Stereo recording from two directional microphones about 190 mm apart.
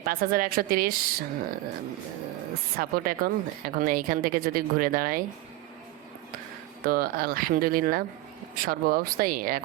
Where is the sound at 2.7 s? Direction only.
50° right (ahead or behind).